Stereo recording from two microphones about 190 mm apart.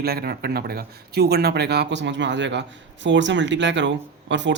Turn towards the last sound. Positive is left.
turn(degrees=-70)  # may be behind; listen again after turning